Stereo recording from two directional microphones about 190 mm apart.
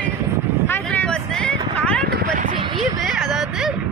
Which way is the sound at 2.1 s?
50° right (ahead or behind).